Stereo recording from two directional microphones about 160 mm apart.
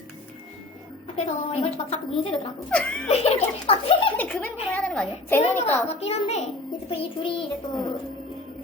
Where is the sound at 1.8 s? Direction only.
30° left (ahead or behind).